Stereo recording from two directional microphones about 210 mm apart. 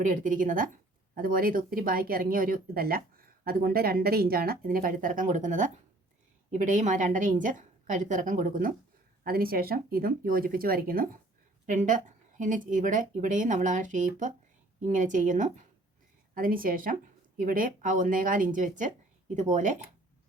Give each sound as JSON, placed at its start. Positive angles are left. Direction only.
{"t": 0.0, "sound": "a woman's voice", "side_deg": -40}